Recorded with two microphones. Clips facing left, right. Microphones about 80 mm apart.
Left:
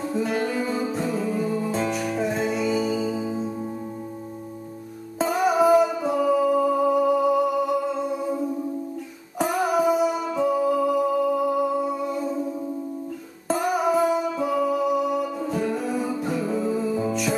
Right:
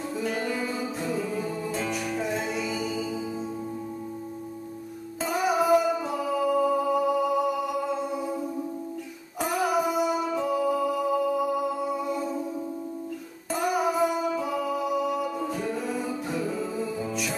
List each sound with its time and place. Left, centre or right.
0.6 s music: centre
3.2 s music: left
5.2 s music: centre
9.4 s music: centre
13.5 s music: centre